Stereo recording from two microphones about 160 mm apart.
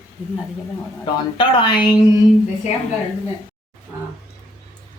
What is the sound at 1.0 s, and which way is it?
Speech, 30° left (ahead or behind).